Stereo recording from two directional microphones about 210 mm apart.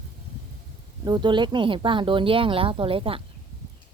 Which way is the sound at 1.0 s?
20° right (ahead or behind).